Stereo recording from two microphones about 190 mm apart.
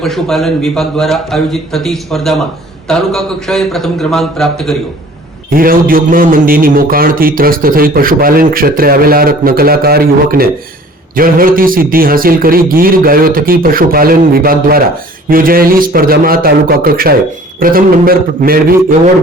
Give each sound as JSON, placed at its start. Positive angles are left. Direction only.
{"t": 0.0, "sound": "a man's voice", "side_deg": 0}
{"t": 5.5, "sound": "a man's voice", "side_deg": -50}